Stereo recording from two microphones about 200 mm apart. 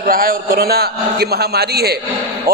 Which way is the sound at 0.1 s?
45° right (ahead or behind).